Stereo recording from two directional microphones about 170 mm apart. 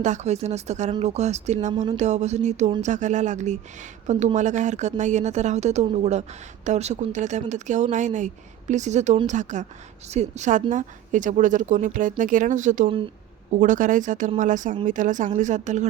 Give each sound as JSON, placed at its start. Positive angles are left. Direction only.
{"t": 0.0, "sound": "speech", "side_deg": -45}